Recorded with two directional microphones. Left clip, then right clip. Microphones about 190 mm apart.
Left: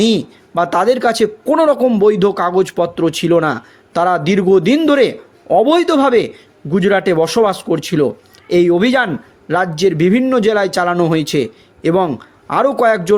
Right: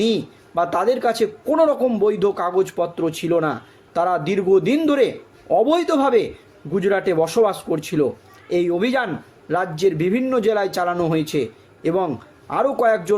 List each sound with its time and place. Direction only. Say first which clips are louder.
0.0 s speech: left 5 dB; 50° left (ahead or behind)